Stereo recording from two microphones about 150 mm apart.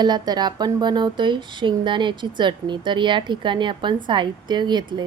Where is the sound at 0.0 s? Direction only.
30° right (ahead or behind).